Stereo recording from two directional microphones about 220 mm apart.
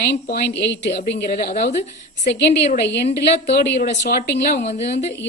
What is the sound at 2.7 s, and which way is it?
Speech, 50° left (ahead or behind).